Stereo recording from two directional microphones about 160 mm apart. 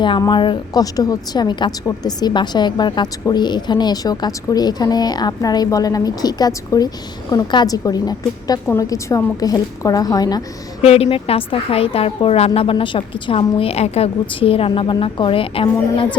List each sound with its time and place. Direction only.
0.0 s a woman's voice: 30° left (ahead or behind)
10.8 s a woman's voice: 40° left (ahead or behind)